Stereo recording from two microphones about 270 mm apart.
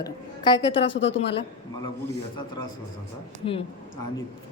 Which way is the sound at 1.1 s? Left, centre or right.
Left.